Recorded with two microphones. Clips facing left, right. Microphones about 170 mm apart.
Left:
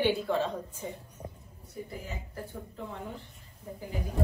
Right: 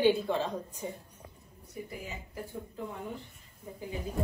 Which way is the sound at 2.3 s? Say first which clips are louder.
Even; 15° right (ahead or behind).